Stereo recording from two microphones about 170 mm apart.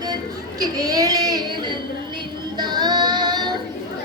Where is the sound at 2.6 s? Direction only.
25° right (ahead or behind).